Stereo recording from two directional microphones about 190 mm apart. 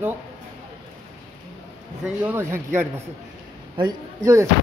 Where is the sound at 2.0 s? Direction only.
10° right (ahead or behind).